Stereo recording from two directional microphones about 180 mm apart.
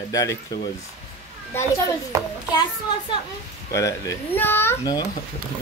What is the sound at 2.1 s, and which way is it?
Speech, 15° right (ahead or behind).